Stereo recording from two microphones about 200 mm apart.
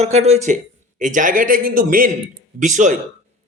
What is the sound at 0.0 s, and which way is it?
Speech, 30° right (ahead or behind).